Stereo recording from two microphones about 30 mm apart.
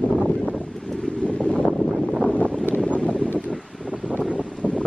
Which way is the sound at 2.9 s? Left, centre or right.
Left.